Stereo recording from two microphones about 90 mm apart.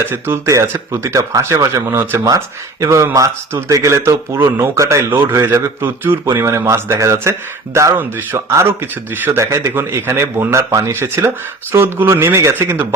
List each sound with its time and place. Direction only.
0.0 s speech: 25° right (ahead or behind)